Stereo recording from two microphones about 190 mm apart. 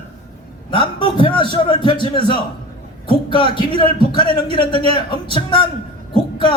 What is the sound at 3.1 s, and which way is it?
Speech, 25° left (ahead or behind).